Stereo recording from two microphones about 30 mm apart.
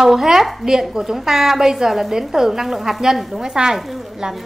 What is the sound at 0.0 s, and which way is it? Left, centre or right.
Speech, centre.